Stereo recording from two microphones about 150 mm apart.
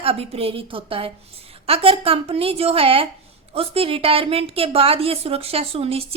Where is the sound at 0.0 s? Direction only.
40° right (ahead or behind).